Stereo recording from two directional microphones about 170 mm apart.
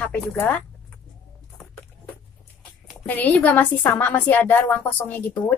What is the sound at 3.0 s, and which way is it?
A woman's voice, 10° left (ahead or behind).